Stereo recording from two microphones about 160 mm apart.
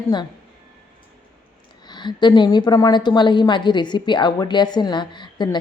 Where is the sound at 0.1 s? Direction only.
25° left (ahead or behind).